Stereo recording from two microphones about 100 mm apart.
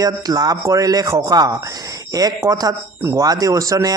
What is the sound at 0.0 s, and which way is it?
A man's voice, 40° right (ahead or behind).